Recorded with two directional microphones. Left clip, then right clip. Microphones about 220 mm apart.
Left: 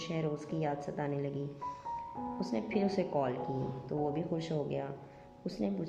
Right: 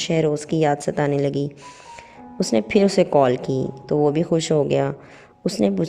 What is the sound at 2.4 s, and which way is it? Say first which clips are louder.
Speech: right 18 dB; 45° right (ahead or behind).